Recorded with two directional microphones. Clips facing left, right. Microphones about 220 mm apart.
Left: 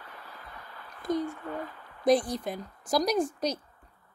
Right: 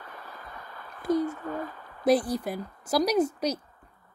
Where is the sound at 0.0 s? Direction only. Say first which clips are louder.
Right 3 dB; 45° right (ahead or behind).